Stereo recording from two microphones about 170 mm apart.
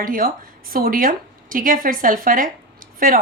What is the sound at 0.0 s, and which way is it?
A woman's voice, 55° right (ahead or behind).